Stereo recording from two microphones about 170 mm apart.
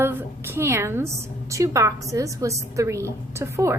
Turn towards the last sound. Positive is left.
turn(degrees=-15)  # may be behind; listen again after turning